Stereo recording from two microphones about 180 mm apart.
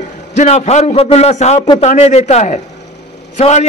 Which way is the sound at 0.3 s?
40° left (ahead or behind).